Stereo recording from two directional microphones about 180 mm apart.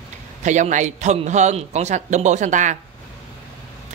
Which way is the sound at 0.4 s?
40° right (ahead or behind).